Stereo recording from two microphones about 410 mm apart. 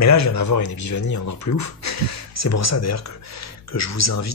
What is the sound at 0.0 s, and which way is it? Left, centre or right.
Speech, left.